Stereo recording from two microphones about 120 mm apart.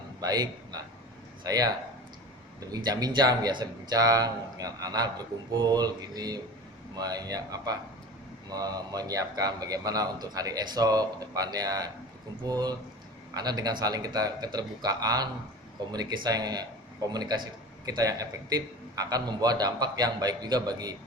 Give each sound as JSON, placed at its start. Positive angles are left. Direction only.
{"t": 0.2, "sound": "a man's voice", "side_deg": -30}